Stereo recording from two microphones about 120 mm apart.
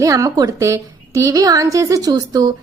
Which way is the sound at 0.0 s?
30° right (ahead or behind).